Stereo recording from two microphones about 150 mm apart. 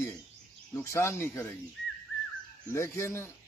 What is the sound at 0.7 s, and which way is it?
Speech, 15° left (ahead or behind).